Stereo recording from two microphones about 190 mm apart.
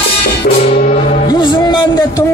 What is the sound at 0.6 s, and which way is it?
Music, 35° left (ahead or behind).